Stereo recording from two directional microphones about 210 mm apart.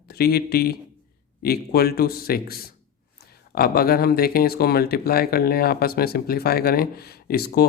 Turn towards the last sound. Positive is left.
turn(degrees=45)  # may be behind; listen again after turning